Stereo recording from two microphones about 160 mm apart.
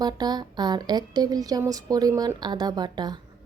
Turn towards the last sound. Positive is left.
turn(degrees=-25)  # may be behind; listen again after turning